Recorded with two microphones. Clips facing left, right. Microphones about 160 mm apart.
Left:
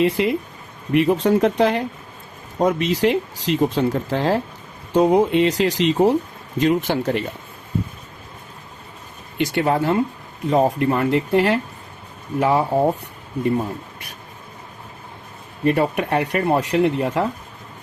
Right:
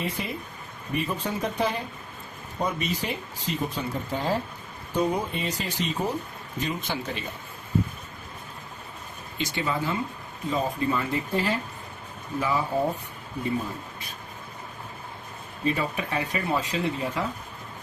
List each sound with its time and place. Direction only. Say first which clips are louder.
0.0 s speech: left 13 dB; 90° left
6.6 s speech: left 12 dB; 75° left (ahead or behind)
9.4 s speech: left 9 dB; 65° left (ahead or behind)
12.4 s speech: left 8 dB; 65° left (ahead or behind)
15.6 s speech: left 9 dB; 65° left (ahead or behind)